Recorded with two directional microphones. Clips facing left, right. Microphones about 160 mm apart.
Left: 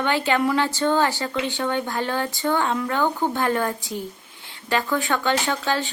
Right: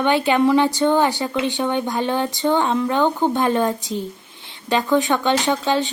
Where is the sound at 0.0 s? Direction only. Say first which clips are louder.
Right 5 dB; 15° right (ahead or behind).